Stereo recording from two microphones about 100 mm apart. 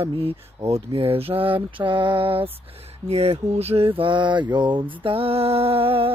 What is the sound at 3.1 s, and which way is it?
Mantra, 90° right.